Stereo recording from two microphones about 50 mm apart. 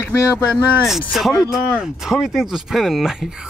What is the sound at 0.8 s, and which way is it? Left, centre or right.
Speech, centre.